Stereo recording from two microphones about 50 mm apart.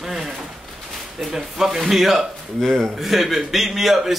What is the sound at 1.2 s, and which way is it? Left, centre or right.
A man's voice, centre.